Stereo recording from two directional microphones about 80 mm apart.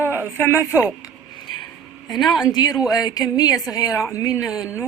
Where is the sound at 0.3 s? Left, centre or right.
Left.